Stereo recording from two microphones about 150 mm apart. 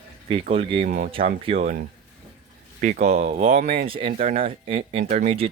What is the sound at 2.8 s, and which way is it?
Speech, 55° right (ahead or behind).